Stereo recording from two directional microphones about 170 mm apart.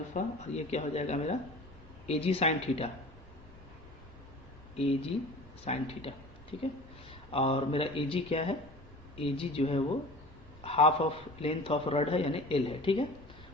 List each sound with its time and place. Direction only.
0.1 s a man's voice: 40° left (ahead or behind)
4.8 s a man's voice: 35° left (ahead or behind)